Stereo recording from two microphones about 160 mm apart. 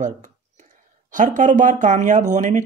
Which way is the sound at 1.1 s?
55° right (ahead or behind).